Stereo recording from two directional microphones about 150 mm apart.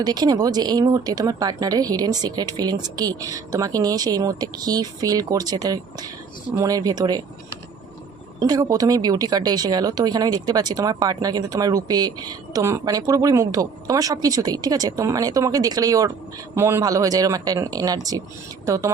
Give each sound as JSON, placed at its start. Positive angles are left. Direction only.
{"t": 0.0, "sound": "speech", "side_deg": -25}
{"t": 8.4, "sound": "speech", "side_deg": -25}